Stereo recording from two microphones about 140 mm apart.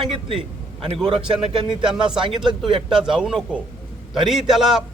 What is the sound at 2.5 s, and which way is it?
Speech, 35° right (ahead or behind).